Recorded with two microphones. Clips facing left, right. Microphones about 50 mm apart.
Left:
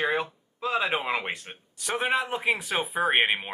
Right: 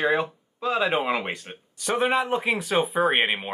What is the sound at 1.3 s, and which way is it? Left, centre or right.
Speech, centre.